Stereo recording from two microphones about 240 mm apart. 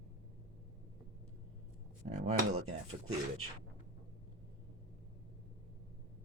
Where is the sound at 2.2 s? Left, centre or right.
Right.